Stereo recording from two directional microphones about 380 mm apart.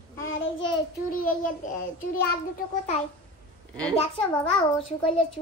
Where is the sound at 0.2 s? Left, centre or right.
Left.